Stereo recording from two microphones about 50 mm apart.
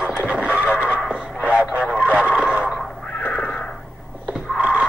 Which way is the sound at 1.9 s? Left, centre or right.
Right.